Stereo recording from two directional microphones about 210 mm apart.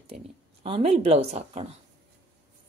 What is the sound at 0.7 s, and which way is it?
A woman's voice, 30° right (ahead or behind).